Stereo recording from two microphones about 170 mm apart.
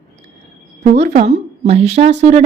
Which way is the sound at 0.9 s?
45° right (ahead or behind).